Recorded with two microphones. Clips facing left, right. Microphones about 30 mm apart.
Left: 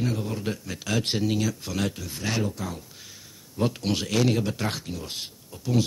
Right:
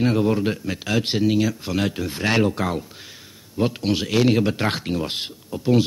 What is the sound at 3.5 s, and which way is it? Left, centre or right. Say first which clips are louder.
Speech: right 4 dB; right.